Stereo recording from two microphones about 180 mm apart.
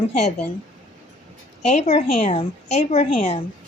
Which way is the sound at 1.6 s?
40° left (ahead or behind).